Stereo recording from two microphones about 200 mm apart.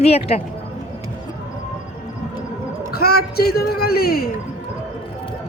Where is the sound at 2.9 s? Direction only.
50° left (ahead or behind).